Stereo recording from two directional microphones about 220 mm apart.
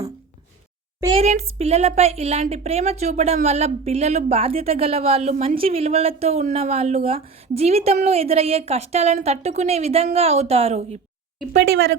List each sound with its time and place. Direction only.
1.0 s a woman's voice: 30° right (ahead or behind)
11.5 s a woman's voice: 60° right (ahead or behind)